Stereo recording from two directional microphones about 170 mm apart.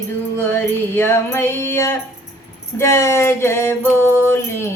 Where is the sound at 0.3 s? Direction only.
10° left (ahead or behind).